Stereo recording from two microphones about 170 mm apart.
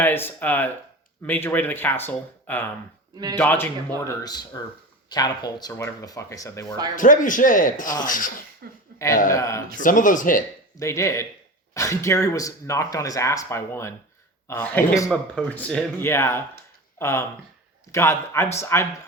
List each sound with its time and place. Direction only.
0.0 s speech: 10° left (ahead or behind)
6.9 s a man's voice: 50° left (ahead or behind)
8.6 s speech: 65° right (ahead or behind)
9.3 s speech: 15° left (ahead or behind)
9.8 s a man's voice: 50° left (ahead or behind)
10.8 s speech: 15° left (ahead or behind)